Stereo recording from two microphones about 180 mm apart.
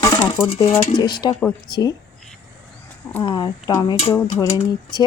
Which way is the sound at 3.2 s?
25° left (ahead or behind).